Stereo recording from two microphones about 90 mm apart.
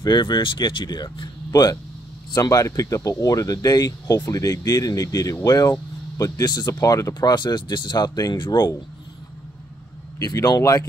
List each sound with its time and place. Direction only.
0.0 s speech: 55° left (ahead or behind); by 7.2 s 40° left (ahead or behind)
7.2 s speech: 55° left (ahead or behind)
10.1 s speech: 40° left (ahead or behind)